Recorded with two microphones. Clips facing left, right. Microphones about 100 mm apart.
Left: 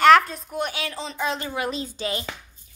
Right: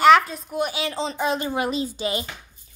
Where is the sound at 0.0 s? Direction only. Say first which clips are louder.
Even; centre (ahead or behind).